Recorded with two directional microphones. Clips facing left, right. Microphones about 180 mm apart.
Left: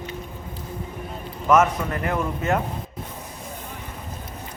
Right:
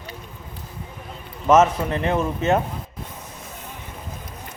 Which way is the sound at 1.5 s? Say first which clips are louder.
Right 3 dB; 25° right (ahead or behind).